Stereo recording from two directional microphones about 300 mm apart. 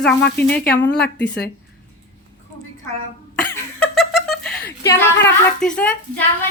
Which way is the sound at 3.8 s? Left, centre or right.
Centre.